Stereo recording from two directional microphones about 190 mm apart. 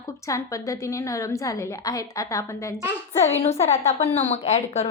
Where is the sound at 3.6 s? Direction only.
35° left (ahead or behind).